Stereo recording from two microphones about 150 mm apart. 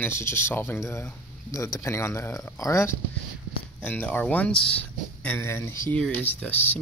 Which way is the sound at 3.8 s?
10° left (ahead or behind).